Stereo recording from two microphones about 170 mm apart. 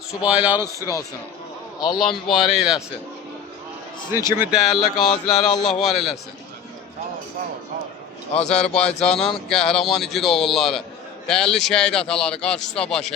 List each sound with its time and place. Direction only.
0.2 s speech: 5° right (ahead or behind)
0.8 s speech: 20° left (ahead or behind)
2.0 s a man's voice: centre (ahead or behind)
4.4 s a man's voice: centre (ahead or behind)
8.4 s a man's voice: 5° left (ahead or behind)